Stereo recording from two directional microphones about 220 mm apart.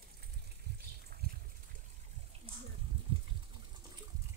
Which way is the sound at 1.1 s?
45° right (ahead or behind).